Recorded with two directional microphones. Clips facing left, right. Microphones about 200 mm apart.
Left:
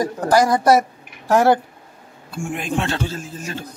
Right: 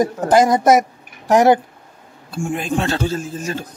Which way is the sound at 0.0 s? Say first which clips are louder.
Right 3 dB; 20° right (ahead or behind).